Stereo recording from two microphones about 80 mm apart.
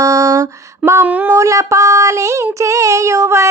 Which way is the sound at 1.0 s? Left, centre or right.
Right.